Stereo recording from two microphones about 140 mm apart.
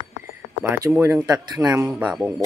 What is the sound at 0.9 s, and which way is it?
Speech, 20° right (ahead or behind).